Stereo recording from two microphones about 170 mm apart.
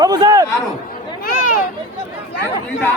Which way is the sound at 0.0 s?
25° right (ahead or behind).